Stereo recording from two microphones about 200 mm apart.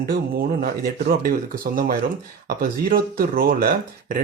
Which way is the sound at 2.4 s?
45° right (ahead or behind).